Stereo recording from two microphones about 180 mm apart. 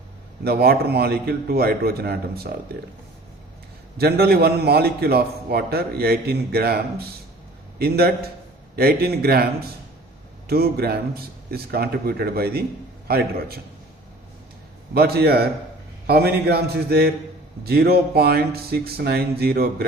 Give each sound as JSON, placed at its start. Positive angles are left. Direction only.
{"t": 0.4, "sound": "a man's voice", "side_deg": -60}
{"t": 3.9, "sound": "a man's voice", "side_deg": -60}
{"t": 14.9, "sound": "a man's voice", "side_deg": -60}